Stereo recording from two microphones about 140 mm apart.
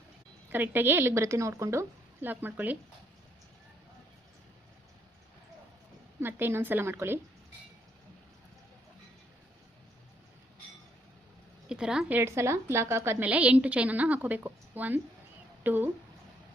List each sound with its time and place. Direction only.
0.5 s a woman's voice: 15° right (ahead or behind)
6.1 s a woman's voice: 15° right (ahead or behind)
11.7 s a woman's voice: 5° right (ahead or behind)